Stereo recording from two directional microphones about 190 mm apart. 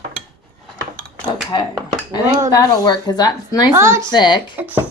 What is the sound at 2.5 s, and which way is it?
Speech, 20° left (ahead or behind).